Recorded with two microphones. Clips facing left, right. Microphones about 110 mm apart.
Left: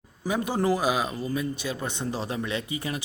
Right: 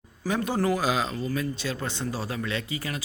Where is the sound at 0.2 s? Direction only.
15° left (ahead or behind).